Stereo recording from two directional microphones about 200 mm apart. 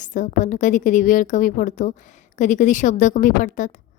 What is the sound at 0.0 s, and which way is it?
A woman's voice, 40° left (ahead or behind).